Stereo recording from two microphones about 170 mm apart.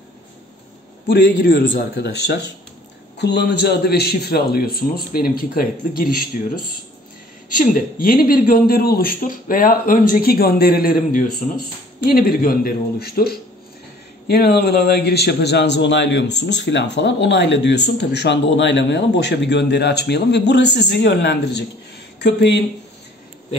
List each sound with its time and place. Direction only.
1.0 s a man's voice: 60° left (ahead or behind); by 22.6 s 90° left